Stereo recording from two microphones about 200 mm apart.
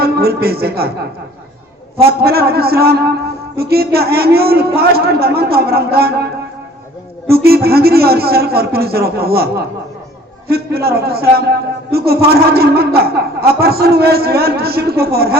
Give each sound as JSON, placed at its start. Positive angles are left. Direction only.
{"t": 0.0, "sound": "a man's voice", "side_deg": -50}
{"t": 2.0, "sound": "a man's voice", "side_deg": -50}
{"t": 7.3, "sound": "a man's voice", "side_deg": -50}